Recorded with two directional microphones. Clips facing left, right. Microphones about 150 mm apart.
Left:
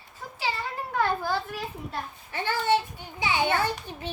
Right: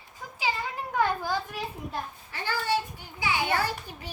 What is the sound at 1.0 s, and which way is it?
A child's voice, 15° right (ahead or behind).